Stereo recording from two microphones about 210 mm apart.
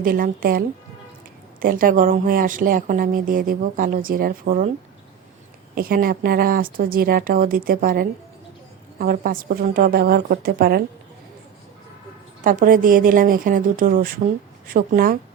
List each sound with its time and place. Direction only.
0.0 s speech: 40° right (ahead or behind)
5.7 s speech: 45° right (ahead or behind)
12.4 s speech: 40° right (ahead or behind)